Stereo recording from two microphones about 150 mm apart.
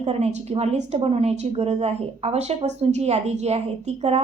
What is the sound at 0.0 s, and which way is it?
A woman's voice, 45° right (ahead or behind).